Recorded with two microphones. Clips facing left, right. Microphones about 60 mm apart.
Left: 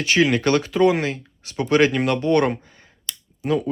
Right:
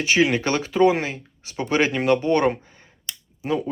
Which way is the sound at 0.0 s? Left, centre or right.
Centre.